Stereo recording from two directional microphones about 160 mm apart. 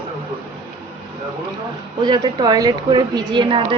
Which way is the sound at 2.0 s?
25° right (ahead or behind).